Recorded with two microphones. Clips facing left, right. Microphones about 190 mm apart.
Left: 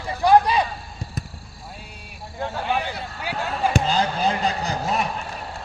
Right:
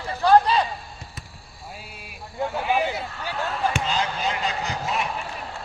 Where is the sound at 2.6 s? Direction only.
5° right (ahead or behind).